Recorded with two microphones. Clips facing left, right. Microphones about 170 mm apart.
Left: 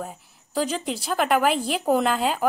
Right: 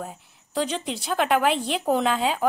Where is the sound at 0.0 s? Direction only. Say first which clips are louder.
Left 1 dB; centre (ahead or behind).